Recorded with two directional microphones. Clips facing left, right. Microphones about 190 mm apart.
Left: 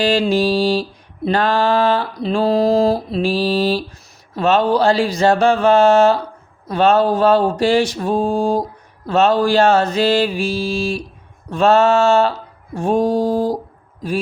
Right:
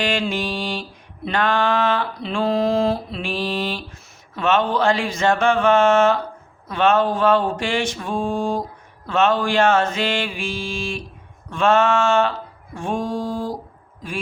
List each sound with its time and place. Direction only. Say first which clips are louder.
0.0 s mantra: left 7 dB; 35° left (ahead or behind)